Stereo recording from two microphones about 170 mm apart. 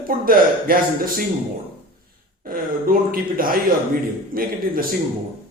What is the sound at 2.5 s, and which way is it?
Speech, 55° right (ahead or behind).